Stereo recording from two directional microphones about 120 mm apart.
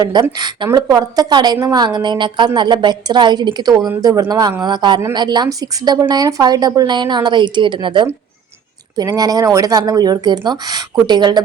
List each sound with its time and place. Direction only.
0.0 s speech: 35° right (ahead or behind)